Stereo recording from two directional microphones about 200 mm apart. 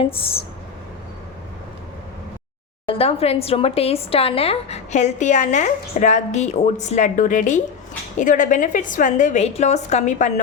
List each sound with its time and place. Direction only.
0.0 s speech: 30° left (ahead or behind)
2.9 s a woman's voice: 30° left (ahead or behind)